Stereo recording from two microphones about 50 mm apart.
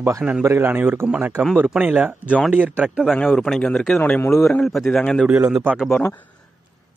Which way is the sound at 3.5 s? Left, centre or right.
Centre.